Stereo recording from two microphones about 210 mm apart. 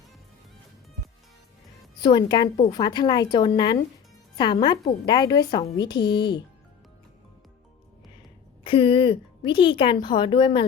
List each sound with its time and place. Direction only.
2.0 s a woman's voice: 20° left (ahead or behind)
8.6 s a woman's voice: 25° left (ahead or behind)